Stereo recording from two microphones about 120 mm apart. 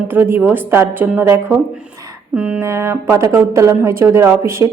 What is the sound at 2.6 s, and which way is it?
A woman's voice, 25° right (ahead or behind).